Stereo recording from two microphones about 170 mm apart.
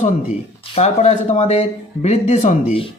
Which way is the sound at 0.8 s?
40° left (ahead or behind).